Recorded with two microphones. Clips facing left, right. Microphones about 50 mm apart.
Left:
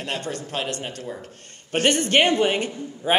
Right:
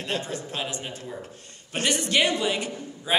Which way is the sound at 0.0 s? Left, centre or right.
Left.